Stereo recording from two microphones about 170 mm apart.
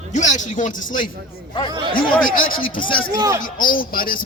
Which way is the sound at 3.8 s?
60° left (ahead or behind).